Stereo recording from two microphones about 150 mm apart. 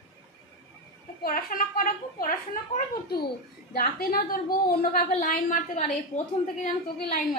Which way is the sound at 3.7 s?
80° left.